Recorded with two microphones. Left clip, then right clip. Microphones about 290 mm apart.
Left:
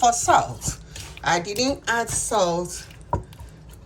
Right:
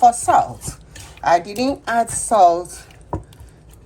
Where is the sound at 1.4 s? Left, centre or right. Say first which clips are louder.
Right 2 dB; centre.